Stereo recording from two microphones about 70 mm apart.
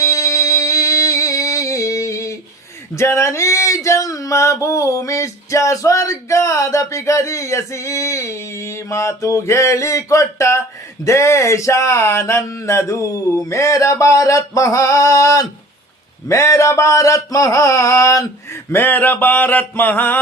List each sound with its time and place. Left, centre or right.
0.0 s music: left
2.9 s male singing: left
18.7 s mantra: left